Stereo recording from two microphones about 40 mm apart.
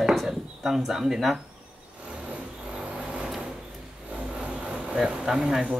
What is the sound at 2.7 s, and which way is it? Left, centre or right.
Vehicle, right.